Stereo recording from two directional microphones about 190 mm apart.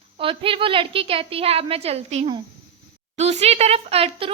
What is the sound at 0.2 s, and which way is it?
A woman's voice, 30° right (ahead or behind).